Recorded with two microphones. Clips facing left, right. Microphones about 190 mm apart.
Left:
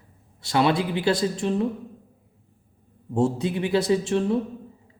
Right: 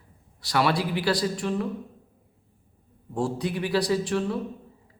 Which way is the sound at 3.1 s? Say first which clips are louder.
Left 4 dB; 25° left (ahead or behind).